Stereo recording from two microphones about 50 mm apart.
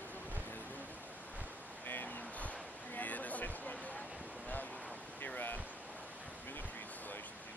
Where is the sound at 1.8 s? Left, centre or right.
Left.